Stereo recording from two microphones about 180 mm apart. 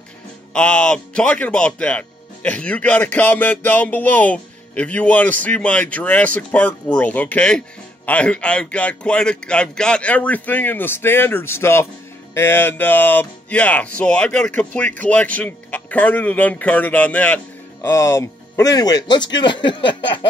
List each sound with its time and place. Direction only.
0.5 s speech: 5° left (ahead or behind); by 20.0 s 25° left (ahead or behind)